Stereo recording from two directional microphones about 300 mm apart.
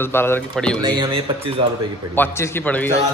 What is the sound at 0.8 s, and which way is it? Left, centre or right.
Speech, centre.